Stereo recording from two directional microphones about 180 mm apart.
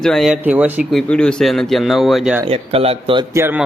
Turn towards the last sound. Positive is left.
turn(degrees=-10)  # may be behind; listen again after turning